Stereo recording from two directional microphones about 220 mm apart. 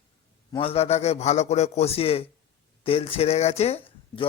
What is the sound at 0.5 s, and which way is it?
Speech, 25° left (ahead or behind).